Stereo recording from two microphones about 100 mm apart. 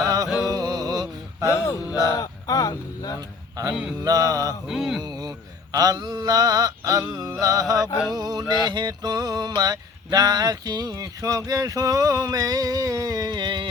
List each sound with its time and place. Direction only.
0.0 s music: 40° right (ahead or behind)
0.3 s music: 5° right (ahead or behind)
0.5 s a sound: 40° right (ahead or behind)
2.0 s speech: 35° left (ahead or behind)
3.7 s mantra: 10° right (ahead or behind)
4.0 s speech: 40° right (ahead or behind)
4.7 s speech: 5° right (ahead or behind)
5.7 s speech: 40° right (ahead or behind)
8.1 s music: 40° right (ahead or behind)
9.6 s speech: 40° right (ahead or behind)